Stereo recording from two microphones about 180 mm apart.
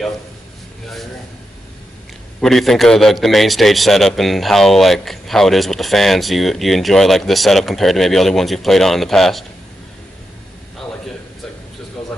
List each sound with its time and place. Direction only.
2.4 s a man's voice: centre (ahead or behind)